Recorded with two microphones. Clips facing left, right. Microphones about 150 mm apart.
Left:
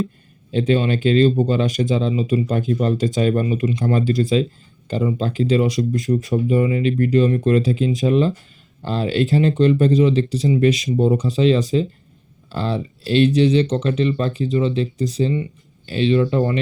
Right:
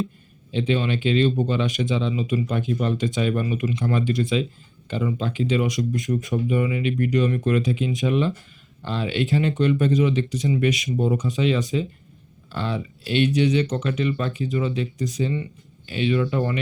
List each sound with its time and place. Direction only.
0.5 s speech: 40° left (ahead or behind)
6.1 s speech: 20° left (ahead or behind)
6.5 s speech: 35° left (ahead or behind)